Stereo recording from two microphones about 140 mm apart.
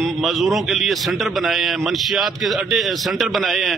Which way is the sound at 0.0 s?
Centre (ahead or behind).